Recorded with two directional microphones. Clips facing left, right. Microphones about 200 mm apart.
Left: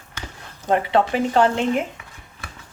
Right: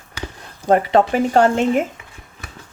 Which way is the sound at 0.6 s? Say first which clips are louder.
Right 4 dB; 40° right (ahead or behind).